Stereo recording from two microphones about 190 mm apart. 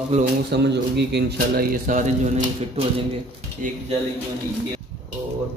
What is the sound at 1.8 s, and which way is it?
Speech, 40° right (ahead or behind).